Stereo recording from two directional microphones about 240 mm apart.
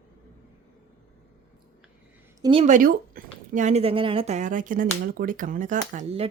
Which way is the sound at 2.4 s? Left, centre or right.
Right.